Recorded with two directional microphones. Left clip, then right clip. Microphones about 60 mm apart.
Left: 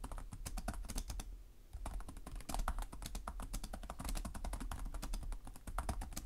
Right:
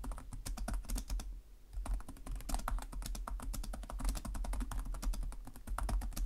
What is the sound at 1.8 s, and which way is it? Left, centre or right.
Computer keyboard, right.